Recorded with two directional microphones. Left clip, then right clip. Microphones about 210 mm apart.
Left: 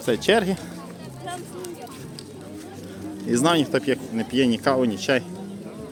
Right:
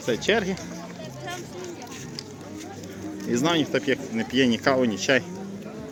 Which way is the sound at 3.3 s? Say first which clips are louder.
Left 3 dB; 25° left (ahead or behind).